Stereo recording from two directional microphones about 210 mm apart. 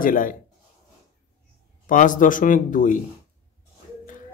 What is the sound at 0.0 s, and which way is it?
Speech, 40° left (ahead or behind).